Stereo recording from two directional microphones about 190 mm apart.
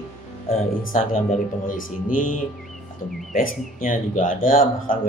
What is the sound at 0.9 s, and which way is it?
Speech, 45° left (ahead or behind).